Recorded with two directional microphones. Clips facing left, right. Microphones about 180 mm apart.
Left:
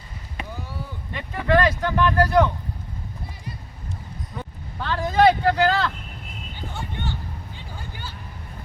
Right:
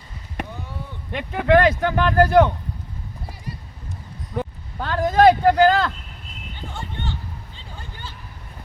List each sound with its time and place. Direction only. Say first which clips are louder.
1.1 s speech: right 4 dB; 60° right (ahead or behind)
4.8 s speech: right 3 dB; 50° right (ahead or behind)
6.7 s a sound: even; 10° left (ahead or behind)